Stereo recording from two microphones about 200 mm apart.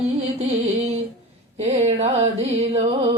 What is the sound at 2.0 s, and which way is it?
Speech, 30° right (ahead or behind).